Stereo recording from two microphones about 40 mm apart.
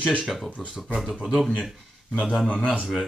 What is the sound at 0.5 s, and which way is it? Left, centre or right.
Speech, left.